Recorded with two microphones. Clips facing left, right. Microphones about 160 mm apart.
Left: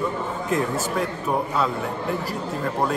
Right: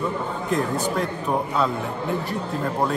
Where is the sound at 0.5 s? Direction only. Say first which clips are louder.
Right 1 dB; 5° left (ahead or behind).